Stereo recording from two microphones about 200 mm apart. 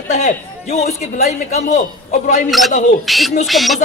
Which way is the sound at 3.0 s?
Centre (ahead or behind).